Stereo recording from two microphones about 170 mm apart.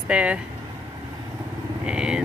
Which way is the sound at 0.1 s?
5° right (ahead or behind).